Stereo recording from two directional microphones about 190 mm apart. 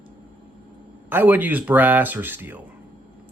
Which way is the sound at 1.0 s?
10° right (ahead or behind).